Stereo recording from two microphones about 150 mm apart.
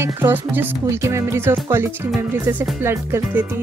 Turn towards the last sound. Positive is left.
turn(degrees=-15)  # may be behind; listen again after turning